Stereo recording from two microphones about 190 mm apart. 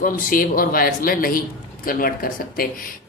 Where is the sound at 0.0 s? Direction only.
45° left (ahead or behind).